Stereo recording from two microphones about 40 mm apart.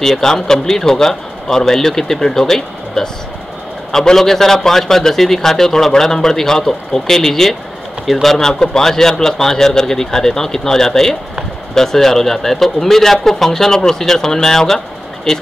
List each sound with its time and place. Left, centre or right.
0.0 s a man's voice: centre